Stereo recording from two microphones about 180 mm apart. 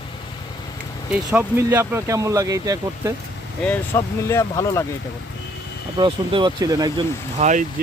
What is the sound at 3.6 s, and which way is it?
Speech, 10° left (ahead or behind).